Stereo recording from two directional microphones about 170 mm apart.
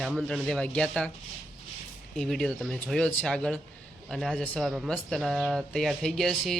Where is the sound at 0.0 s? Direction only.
Centre (ahead or behind).